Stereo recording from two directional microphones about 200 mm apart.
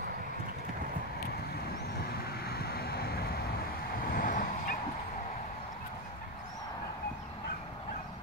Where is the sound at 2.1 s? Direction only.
50° left (ahead or behind).